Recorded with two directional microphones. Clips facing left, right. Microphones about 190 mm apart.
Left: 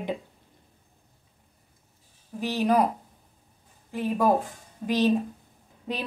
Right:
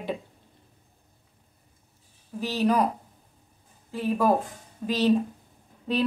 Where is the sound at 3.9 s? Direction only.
15° left (ahead or behind).